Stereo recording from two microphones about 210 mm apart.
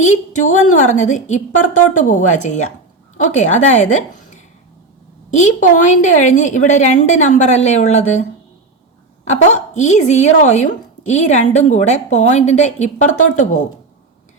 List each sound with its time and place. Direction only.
0.0 s speech: 35° left (ahead or behind)
5.4 s speech: 35° left (ahead or behind)
9.3 s speech: 35° left (ahead or behind)